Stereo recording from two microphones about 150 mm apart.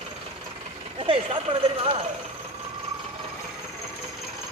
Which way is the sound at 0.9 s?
35° right (ahead or behind).